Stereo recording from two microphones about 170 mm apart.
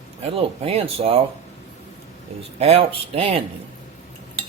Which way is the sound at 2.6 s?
35° right (ahead or behind).